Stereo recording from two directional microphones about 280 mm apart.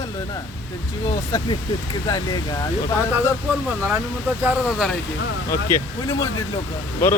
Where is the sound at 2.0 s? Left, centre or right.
Centre.